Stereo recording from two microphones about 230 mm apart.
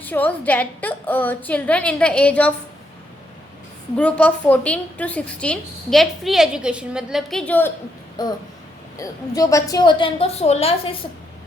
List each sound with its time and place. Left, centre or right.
0.0 s a woman's voice: centre
3.9 s a woman's voice: centre
8.2 s a woman's voice: centre